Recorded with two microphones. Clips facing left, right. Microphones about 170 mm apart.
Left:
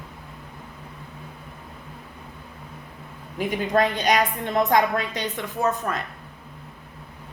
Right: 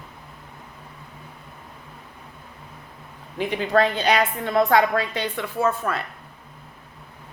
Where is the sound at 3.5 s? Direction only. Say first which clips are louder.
Right 2 dB; 15° left (ahead or behind).